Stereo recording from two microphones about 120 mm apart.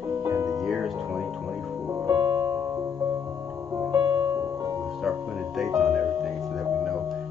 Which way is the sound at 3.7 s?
25° right (ahead or behind).